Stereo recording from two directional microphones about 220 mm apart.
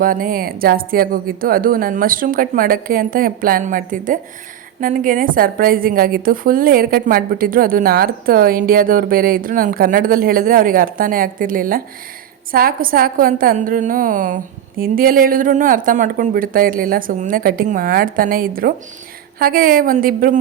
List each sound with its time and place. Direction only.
0.0 s a woman's voice: 40° right (ahead or behind)